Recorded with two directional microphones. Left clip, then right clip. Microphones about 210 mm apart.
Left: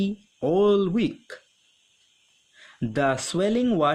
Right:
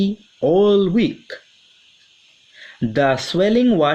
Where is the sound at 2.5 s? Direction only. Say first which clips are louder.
Right 7 dB; 30° left (ahead or behind).